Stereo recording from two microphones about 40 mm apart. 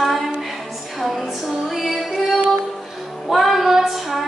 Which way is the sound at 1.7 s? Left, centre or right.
Centre.